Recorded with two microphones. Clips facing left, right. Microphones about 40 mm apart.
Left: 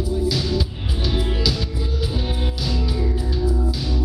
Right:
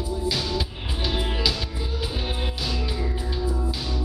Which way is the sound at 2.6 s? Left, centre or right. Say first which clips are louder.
Left 5 dB; centre.